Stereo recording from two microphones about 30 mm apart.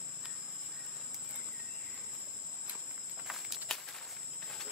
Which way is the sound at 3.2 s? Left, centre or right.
Centre.